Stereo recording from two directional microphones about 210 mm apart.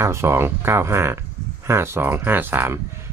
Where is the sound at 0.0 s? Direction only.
15° right (ahead or behind).